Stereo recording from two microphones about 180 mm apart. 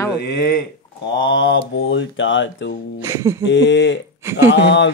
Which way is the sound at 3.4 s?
90° left.